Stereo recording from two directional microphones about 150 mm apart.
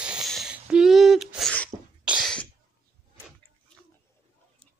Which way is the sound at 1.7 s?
30° right (ahead or behind).